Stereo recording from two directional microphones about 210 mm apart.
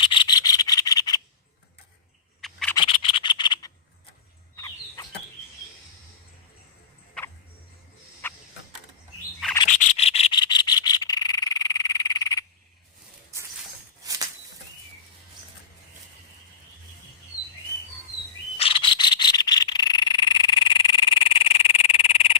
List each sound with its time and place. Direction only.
0.0 s rub: 20° left (ahead or behind)
2.4 s a sound: 5° left (ahead or behind)
2.7 s scratch: 25° left (ahead or behind)
4.5 s chicken: 15° left (ahead or behind)
7.2 s music: 5° left (ahead or behind)
8.2 s a sound: 10° left (ahead or behind)
9.6 s frog: 35° left (ahead or behind); by 12.5 s 15° left (ahead or behind)
14.0 s bird flight: 15° right (ahead or behind)
18.5 s frog: 25° left (ahead or behind)